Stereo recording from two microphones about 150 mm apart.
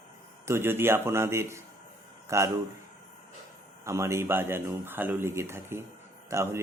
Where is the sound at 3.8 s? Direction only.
20° right (ahead or behind).